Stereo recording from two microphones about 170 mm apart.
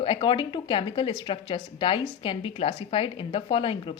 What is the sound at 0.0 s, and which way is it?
Speech, 30° left (ahead or behind).